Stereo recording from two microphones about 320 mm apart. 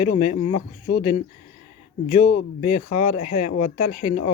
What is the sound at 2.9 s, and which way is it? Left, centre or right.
Speech, left.